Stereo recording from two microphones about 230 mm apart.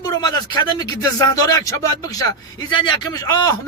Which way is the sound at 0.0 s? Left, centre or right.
Centre.